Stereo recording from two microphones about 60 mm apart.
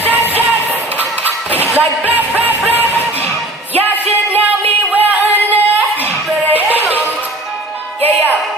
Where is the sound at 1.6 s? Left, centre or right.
Right.